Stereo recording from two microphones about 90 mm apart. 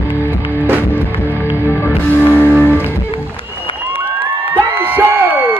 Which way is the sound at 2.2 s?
25° left (ahead or behind).